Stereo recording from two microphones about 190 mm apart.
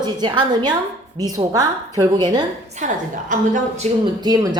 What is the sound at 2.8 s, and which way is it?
A woman's voice, 40° right (ahead or behind).